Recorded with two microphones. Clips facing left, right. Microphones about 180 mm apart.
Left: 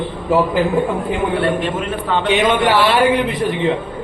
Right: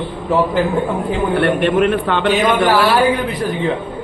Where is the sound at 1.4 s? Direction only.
65° right (ahead or behind).